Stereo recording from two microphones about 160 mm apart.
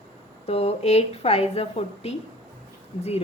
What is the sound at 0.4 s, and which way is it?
A woman's voice, 40° left (ahead or behind).